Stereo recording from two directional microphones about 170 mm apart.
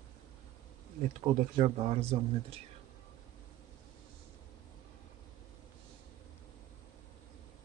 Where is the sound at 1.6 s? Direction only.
35° right (ahead or behind).